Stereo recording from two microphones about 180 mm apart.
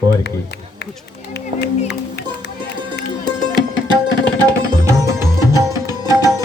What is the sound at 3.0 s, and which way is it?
Music, 70° left (ahead or behind).